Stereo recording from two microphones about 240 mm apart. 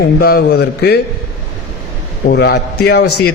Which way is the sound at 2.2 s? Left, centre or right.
Left.